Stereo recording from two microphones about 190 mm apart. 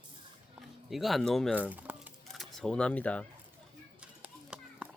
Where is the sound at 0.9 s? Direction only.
Centre (ahead or behind).